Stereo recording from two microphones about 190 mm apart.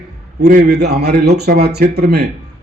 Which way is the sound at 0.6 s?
60° right (ahead or behind).